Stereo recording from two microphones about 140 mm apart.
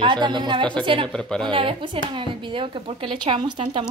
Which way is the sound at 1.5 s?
40° right (ahead or behind).